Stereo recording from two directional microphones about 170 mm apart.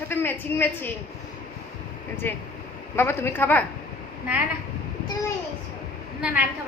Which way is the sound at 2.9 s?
15° left (ahead or behind).